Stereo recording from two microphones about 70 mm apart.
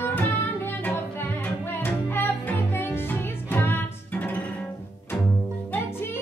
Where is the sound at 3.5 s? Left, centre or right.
Left.